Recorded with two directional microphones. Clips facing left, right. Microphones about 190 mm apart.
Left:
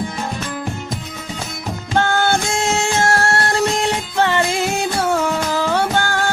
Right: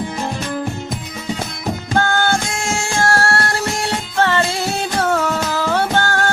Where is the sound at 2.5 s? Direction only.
25° left (ahead or behind).